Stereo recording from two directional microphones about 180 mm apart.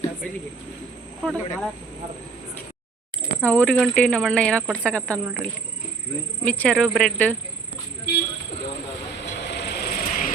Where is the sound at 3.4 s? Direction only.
10° left (ahead or behind).